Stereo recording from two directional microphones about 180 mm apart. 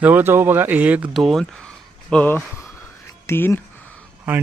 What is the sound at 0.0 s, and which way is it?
A man's voice, 10° right (ahead or behind).